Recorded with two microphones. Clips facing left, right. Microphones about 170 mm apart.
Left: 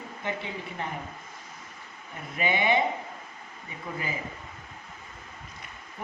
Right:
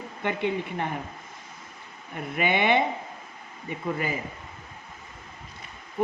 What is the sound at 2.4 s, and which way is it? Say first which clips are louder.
Speech: right 2 dB; 60° right (ahead or behind).